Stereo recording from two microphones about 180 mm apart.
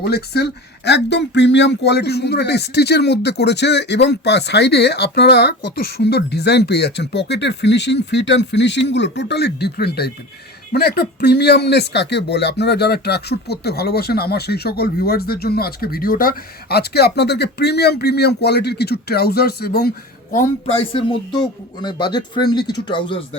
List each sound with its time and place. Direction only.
0.0 s speech: 65° left (ahead or behind)
20.7 s speech: 30° left (ahead or behind)